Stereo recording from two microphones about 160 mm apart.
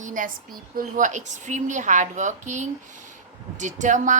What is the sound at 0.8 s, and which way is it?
A woman's voice, 55° right (ahead or behind).